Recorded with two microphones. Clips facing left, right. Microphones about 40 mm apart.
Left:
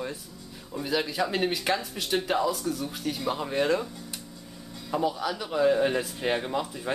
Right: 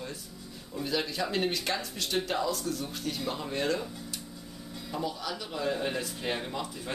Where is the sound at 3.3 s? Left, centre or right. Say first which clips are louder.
Left 6 dB; centre.